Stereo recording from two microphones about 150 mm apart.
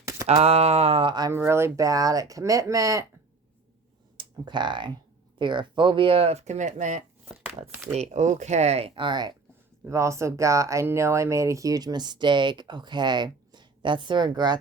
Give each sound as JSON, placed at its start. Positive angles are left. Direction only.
{"t": 0.0, "sound": "a sound", "side_deg": -20}
{"t": 0.3, "sound": "speech", "side_deg": -45}
{"t": 1.3, "sound": "speech", "side_deg": -15}
{"t": 4.2, "sound": "speech", "side_deg": -30}
{"t": 7.7, "sound": "speech", "side_deg": -10}
{"t": 7.9, "sound": "speech", "side_deg": -50}
{"t": 9.8, "sound": "speech", "side_deg": -20}